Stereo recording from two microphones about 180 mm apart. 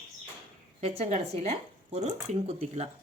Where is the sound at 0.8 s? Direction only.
35° right (ahead or behind).